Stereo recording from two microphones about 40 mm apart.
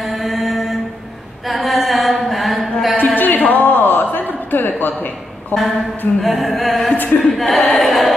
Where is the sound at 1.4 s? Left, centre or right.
Centre.